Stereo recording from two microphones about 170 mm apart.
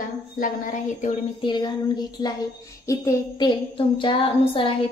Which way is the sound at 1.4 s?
25° left (ahead or behind).